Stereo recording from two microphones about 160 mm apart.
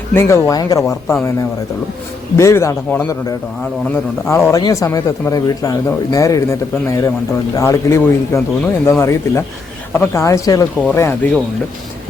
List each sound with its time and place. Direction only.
0.1 s speech: 15° left (ahead or behind)
2.3 s speech: 15° left (ahead or behind)
4.3 s speech: 20° left (ahead or behind)